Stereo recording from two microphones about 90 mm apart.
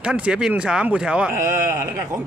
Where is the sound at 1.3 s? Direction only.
35° right (ahead or behind).